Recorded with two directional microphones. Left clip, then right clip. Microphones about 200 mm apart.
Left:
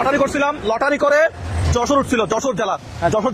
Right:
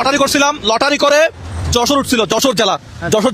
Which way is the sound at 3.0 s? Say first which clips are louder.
Right 2 dB; 65° right (ahead or behind).